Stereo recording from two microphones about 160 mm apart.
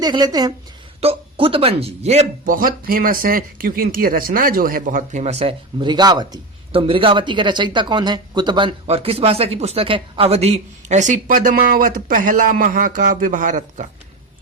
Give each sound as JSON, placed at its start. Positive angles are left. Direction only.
{"t": 0.0, "sound": "a woman's voice", "side_deg": -25}
{"t": 1.0, "sound": "speech", "side_deg": -35}
{"t": 2.5, "sound": "speech", "side_deg": -60}